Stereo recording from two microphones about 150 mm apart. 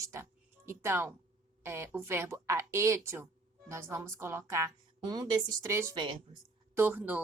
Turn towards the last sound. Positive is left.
turn(degrees=-10)  # may be behind; listen again after turning